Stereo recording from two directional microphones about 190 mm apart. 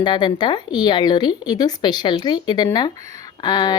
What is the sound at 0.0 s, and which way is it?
Speech, 25° left (ahead or behind).